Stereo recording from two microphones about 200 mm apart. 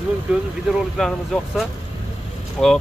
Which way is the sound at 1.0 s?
Centre (ahead or behind).